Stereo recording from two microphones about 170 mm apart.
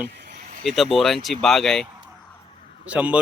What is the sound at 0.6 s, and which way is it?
Speech, centre (ahead or behind).